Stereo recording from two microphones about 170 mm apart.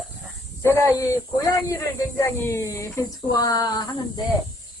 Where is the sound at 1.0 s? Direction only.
20° left (ahead or behind).